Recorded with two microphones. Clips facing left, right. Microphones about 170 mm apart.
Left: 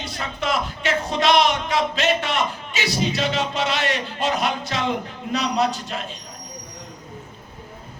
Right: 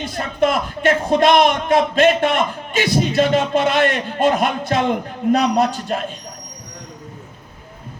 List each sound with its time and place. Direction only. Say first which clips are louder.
0.0 s speech: right 9 dB; 50° right (ahead or behind)